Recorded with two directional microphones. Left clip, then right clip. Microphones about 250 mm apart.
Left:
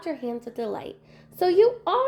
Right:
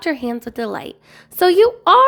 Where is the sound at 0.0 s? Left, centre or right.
Right.